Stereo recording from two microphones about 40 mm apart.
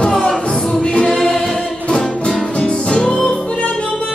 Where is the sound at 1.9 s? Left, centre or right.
Centre.